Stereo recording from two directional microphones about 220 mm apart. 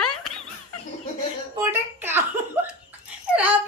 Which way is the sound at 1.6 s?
10° right (ahead or behind).